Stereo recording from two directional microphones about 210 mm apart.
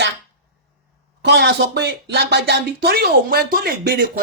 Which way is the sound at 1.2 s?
50° right (ahead or behind).